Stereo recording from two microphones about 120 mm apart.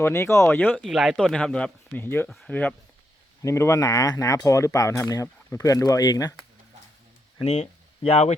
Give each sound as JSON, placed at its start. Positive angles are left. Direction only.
{"t": 0.0, "sound": "speech", "side_deg": 25}
{"t": 0.8, "sound": "speech", "side_deg": -5}
{"t": 3.4, "sound": "speech", "side_deg": 25}
{"t": 7.4, "sound": "speech", "side_deg": 65}